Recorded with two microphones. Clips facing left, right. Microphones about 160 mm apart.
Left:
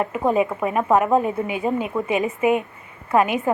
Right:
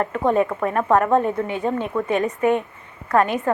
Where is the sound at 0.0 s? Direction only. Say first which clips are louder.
Right 1 dB; 5° left (ahead or behind).